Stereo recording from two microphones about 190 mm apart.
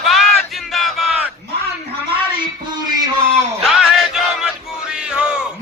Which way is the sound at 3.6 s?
Centre (ahead or behind).